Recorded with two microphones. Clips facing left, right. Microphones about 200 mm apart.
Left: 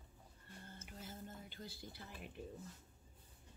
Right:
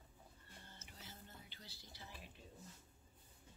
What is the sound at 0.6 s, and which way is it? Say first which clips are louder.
Whispering: left 8 dB; 50° left (ahead or behind).